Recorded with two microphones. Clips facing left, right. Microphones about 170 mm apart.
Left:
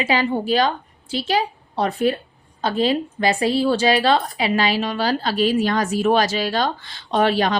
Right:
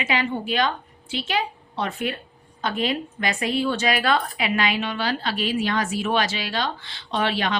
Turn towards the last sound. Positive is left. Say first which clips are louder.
# left 6 dB
turn(degrees=40)  # may be behind; listen again after turning